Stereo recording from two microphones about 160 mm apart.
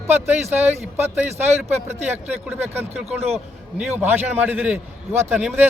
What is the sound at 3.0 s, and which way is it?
Speech, 40° right (ahead or behind).